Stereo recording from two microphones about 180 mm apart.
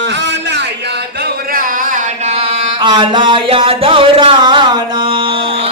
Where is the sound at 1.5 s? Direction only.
50° right (ahead or behind).